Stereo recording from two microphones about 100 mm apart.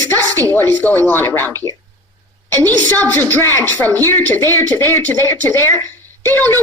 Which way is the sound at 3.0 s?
15° left (ahead or behind).